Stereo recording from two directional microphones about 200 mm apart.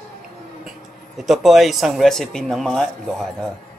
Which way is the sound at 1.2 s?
Centre (ahead or behind).